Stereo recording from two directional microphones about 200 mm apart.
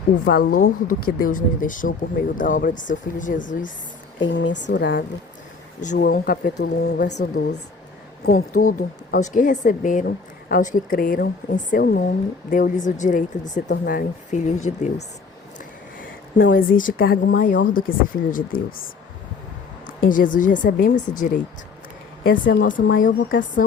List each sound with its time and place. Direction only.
0.3 s a woman's voice: 45° left (ahead or behind)
4.2 s a woman's voice: 65° left (ahead or behind); by 15.0 s 35° left (ahead or behind)
16.4 s a woman's voice: 45° left (ahead or behind)
20.0 s a woman's voice: 40° left (ahead or behind)